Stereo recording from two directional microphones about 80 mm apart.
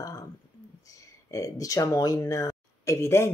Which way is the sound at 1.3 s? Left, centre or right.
Left.